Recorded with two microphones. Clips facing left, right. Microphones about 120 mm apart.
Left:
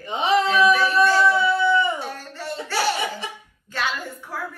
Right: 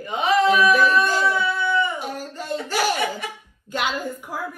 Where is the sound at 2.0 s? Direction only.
15° right (ahead or behind).